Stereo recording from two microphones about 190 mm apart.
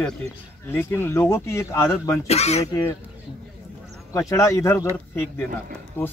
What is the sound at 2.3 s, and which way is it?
Speech, 35° left (ahead or behind).